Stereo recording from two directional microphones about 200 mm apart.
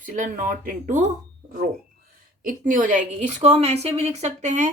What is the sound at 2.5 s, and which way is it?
A woman's voice, 40° right (ahead or behind).